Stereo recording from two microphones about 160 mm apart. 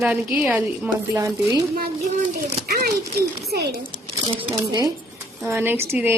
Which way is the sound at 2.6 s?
70° right (ahead or behind).